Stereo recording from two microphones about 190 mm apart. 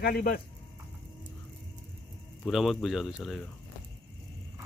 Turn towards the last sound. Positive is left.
turn(degrees=0)  # may be behind; listen again after turning